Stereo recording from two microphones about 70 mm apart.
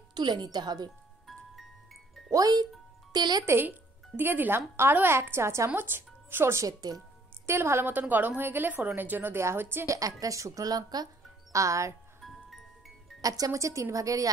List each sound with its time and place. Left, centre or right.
0.1 s speech: right
2.3 s speech: right
4.2 s a woman's voice: right
9.8 s a woman's voice: right
11.5 s speech: right
12.2 s music: centre
13.2 s speech: right